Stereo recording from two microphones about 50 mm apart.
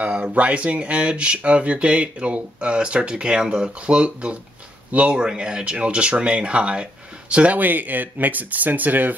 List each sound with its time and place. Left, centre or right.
0.0 s speech: right
7.5 s speech: right